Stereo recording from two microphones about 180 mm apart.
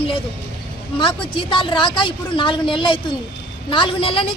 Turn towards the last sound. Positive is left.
turn(degrees=30)  # may be behind; listen again after turning